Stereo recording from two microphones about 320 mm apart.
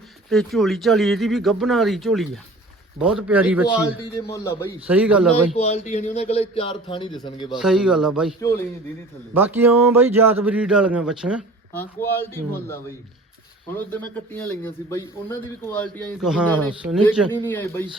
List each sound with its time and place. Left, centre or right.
0.3 s speech: centre
4.3 s a man's voice: centre
4.9 s speech: centre
5.5 s a man's voice: left
7.6 s speech: centre
8.4 s a man's voice: centre
9.3 s speech: centre